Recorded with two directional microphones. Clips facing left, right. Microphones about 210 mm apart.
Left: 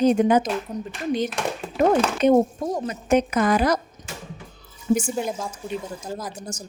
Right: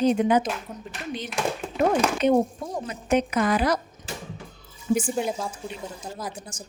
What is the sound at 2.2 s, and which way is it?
Speech, 45° left (ahead or behind).